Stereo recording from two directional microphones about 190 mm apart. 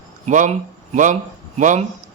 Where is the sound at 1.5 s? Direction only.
40° right (ahead or behind).